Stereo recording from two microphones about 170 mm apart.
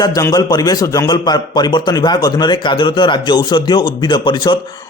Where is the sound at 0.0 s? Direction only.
20° left (ahead or behind).